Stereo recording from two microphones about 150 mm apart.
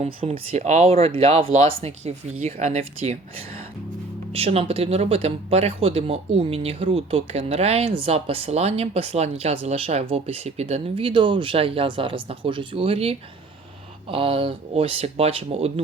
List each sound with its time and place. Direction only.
0.0 s speech: 45° right (ahead or behind)